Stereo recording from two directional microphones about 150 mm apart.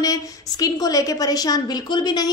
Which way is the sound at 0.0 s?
25° left (ahead or behind).